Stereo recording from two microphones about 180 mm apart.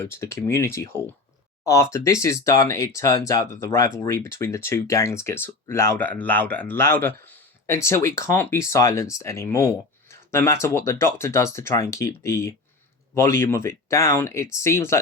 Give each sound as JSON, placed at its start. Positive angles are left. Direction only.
{"t": 0.0, "sound": "speech", "side_deg": 15}